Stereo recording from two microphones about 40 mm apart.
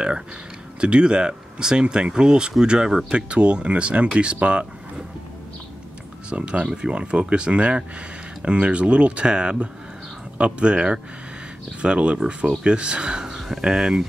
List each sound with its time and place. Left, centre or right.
0.7 s speech: right
6.3 s speech: right